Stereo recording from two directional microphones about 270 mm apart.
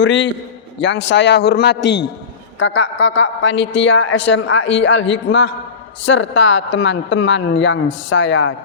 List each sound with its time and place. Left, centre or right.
0.0 s a woman's voice: left